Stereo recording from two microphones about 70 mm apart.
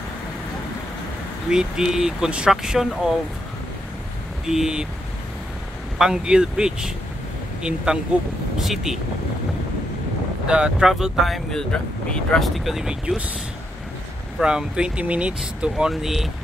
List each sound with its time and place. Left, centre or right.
1.5 s speech: centre
4.5 s speech: centre
5.9 s speech: centre
10.4 s speech: centre
11.7 s speech: centre
12.4 s speech: centre
14.4 s speech: centre
15.9 s speech: centre